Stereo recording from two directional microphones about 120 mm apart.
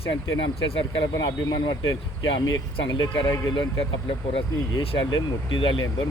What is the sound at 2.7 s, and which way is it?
Speech, 40° left (ahead or behind).